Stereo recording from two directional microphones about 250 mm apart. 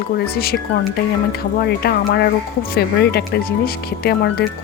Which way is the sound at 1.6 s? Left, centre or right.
Left.